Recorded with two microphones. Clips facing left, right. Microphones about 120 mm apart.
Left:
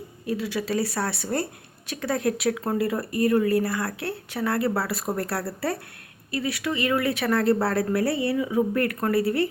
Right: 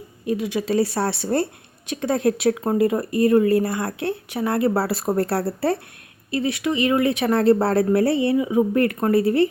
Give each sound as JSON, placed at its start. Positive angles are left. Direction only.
{"t": 0.3, "sound": "speech", "side_deg": -20}